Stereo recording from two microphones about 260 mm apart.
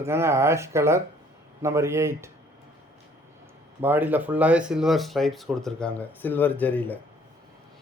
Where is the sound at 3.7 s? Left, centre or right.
Centre.